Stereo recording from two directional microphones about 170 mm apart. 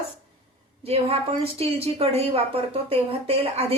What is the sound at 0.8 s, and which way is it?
A woman's voice, 35° right (ahead or behind).